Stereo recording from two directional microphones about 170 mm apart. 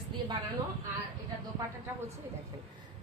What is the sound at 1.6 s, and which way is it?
Speech, 20° right (ahead or behind).